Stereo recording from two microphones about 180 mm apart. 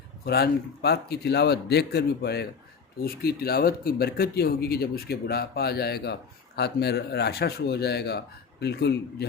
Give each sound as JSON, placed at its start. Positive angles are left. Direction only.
{"t": 0.3, "sound": "speech", "side_deg": 60}